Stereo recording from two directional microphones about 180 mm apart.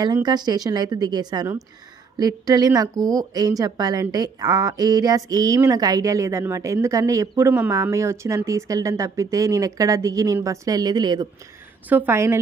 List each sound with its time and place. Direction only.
0.0 s a woman's voice: 25° right (ahead or behind)
11.9 s a woman's voice: 10° right (ahead or behind)